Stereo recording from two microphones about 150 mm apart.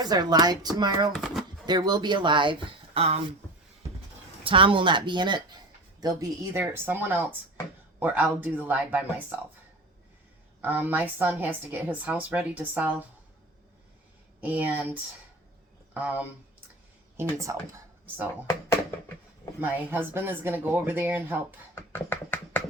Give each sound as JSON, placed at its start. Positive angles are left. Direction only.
{"t": 0.0, "sound": "speech", "side_deg": -25}
{"t": 1.1, "sound": "speech", "side_deg": 0}
{"t": 1.6, "sound": "speech", "side_deg": -30}
{"t": 4.4, "sound": "a woman's voice", "side_deg": -35}
{"t": 10.6, "sound": "a woman's voice", "side_deg": -10}
{"t": 14.4, "sound": "a woman's voice", "side_deg": -10}
{"t": 17.2, "sound": "speech", "side_deg": -20}
{"t": 19.5, "sound": "a woman's voice", "side_deg": -15}
{"t": 21.8, "sound": "a sound", "side_deg": 15}